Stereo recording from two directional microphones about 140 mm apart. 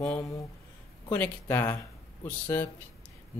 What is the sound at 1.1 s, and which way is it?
Speech, 15° left (ahead or behind).